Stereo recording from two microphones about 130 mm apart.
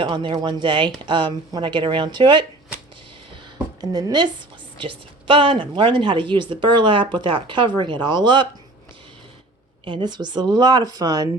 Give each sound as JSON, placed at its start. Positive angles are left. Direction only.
{"t": 0.0, "sound": "a woman's voice", "side_deg": -40}
{"t": 3.8, "sound": "a woman's voice", "side_deg": -30}
{"t": 9.8, "sound": "a woman's voice", "side_deg": -35}